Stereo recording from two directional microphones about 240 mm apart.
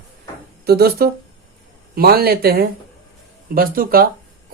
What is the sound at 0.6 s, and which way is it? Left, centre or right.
Speech, right.